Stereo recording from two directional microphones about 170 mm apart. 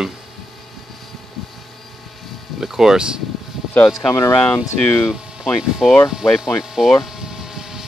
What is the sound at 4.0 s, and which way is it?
Speech, 20° left (ahead or behind).